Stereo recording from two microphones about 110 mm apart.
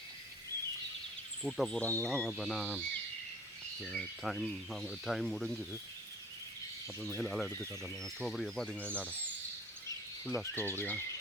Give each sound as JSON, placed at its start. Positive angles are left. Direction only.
{"t": 1.5, "sound": "speech", "side_deg": 5}
{"t": 1.8, "sound": "speech", "side_deg": 15}
{"t": 2.1, "sound": "speech", "side_deg": 0}
{"t": 2.7, "sound": "speech", "side_deg": 15}
{"t": 3.8, "sound": "speech", "side_deg": 0}
{"t": 7.2, "sound": "speech", "side_deg": 5}
{"t": 10.3, "sound": "speech", "side_deg": 20}